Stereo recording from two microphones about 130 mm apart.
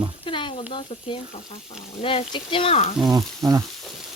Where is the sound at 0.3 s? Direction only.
40° left (ahead or behind).